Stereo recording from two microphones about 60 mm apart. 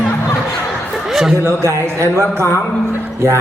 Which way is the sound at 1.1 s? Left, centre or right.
Centre.